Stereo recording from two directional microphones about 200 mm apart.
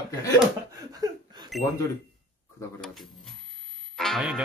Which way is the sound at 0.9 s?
20° right (ahead or behind).